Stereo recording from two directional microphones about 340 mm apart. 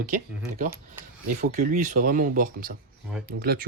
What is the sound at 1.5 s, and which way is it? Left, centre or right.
Speech, right.